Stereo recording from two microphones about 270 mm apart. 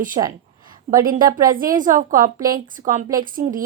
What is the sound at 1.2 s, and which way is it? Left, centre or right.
A woman's voice, right.